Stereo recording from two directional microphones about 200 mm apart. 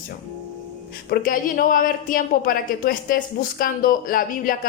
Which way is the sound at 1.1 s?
45° left (ahead or behind).